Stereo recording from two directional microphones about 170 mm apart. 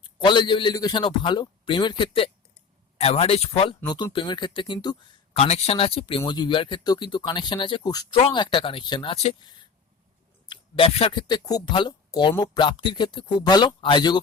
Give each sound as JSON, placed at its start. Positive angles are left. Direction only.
{"t": 0.0, "sound": "speech", "side_deg": 30}
{"t": 5.4, "sound": "speech", "side_deg": 40}
{"t": 10.5, "sound": "speech", "side_deg": 35}